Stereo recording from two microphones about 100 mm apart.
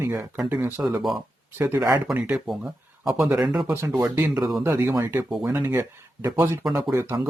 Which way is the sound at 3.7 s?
25° right (ahead or behind).